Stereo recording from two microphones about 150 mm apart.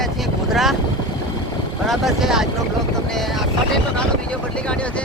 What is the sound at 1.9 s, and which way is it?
Speech, centre (ahead or behind).